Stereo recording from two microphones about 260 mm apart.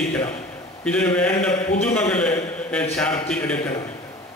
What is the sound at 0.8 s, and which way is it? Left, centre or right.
Mantra, centre.